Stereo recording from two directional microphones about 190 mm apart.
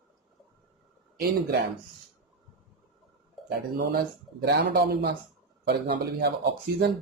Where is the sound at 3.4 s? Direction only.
55° right (ahead or behind).